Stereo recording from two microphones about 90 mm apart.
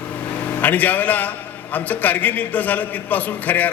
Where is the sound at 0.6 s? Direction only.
20° left (ahead or behind).